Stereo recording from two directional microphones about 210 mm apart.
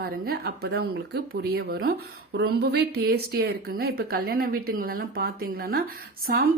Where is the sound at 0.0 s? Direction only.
45° right (ahead or behind).